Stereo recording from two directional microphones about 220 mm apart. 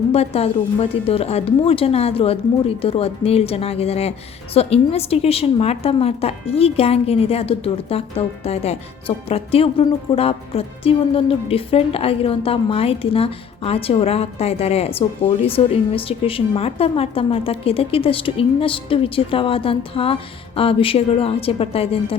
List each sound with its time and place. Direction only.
0.1 s speech: 25° left (ahead or behind)